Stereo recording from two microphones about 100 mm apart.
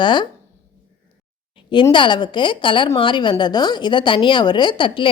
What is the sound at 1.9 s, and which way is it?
A woman's voice, 55° left (ahead or behind).